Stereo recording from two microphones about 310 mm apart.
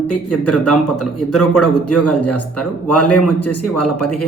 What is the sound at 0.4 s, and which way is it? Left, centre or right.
A man's voice, left.